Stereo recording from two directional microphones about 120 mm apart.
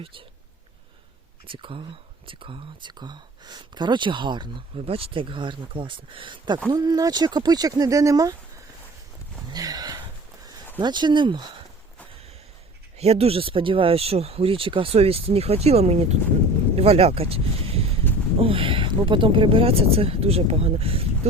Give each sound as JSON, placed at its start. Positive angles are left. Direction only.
{"t": 0.0, "sound": "speech", "side_deg": -45}
{"t": 1.5, "sound": "speech", "side_deg": -45}
{"t": 4.9, "sound": "speech", "side_deg": -50}
{"t": 9.5, "sound": "a sound", "side_deg": -30}
{"t": 10.8, "sound": "speech", "side_deg": -40}
{"t": 13.0, "sound": "speech", "side_deg": -55}